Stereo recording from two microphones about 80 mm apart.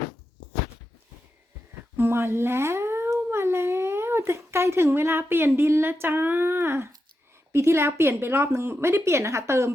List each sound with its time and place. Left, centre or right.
2.0 s a woman's voice: right